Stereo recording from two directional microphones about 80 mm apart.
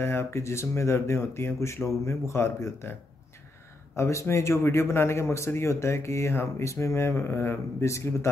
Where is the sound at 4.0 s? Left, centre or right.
Left.